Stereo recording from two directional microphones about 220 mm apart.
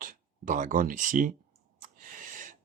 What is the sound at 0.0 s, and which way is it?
Speech, 35° right (ahead or behind).